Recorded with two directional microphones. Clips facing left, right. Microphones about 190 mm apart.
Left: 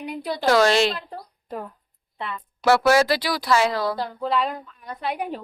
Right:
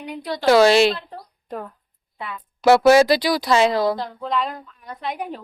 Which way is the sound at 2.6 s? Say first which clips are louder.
Right 5 dB; 15° right (ahead or behind).